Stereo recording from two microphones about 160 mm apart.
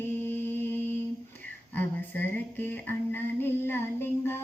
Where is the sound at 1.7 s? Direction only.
10° left (ahead or behind).